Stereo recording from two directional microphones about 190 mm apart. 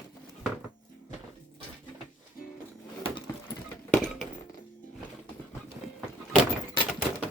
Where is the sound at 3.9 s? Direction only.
5° left (ahead or behind).